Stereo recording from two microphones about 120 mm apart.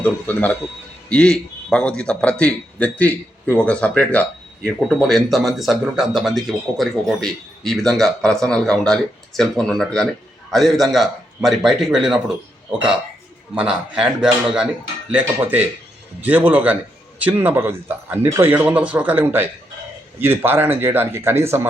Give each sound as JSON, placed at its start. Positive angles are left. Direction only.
{"t": 0.0, "sound": "a man's voice", "side_deg": 15}
{"t": 13.6, "sound": "a man's voice", "side_deg": -5}